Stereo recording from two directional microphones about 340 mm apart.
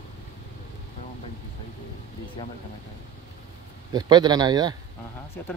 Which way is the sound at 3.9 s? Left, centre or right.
Centre.